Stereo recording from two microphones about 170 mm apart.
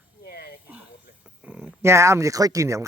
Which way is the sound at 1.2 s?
10° right (ahead or behind).